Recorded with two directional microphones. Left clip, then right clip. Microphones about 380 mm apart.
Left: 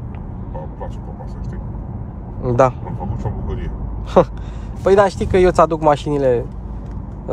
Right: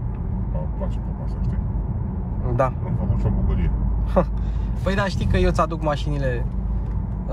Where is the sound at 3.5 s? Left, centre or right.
Centre.